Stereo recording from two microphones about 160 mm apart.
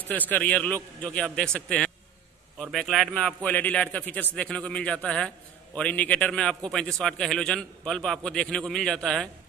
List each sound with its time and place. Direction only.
0.3 s a man's voice: 10° left (ahead or behind)